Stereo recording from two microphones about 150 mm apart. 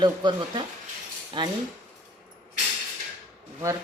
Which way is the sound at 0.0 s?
30° right (ahead or behind).